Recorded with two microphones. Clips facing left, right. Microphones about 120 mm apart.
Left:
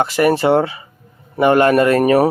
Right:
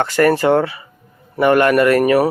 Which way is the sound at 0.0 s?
15° left (ahead or behind).